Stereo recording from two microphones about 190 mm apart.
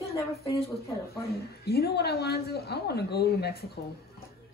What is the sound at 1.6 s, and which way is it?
Speech, 55° left (ahead or behind).